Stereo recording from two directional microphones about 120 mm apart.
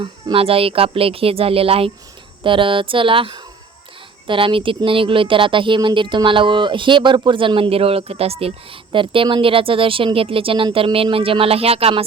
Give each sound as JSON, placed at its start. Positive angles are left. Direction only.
{"t": 0.0, "sound": "speech", "side_deg": -50}